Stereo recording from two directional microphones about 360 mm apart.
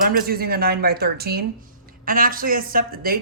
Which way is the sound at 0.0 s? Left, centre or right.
Right.